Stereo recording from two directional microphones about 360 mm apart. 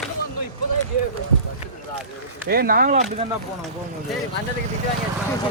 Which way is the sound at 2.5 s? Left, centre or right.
Right.